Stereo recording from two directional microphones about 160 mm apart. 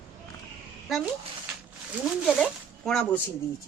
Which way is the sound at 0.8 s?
5° right (ahead or behind).